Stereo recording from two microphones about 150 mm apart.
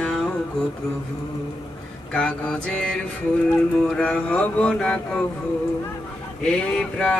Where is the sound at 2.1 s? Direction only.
5° left (ahead or behind).